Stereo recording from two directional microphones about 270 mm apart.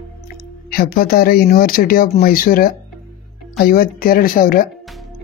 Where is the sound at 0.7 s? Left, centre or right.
Left.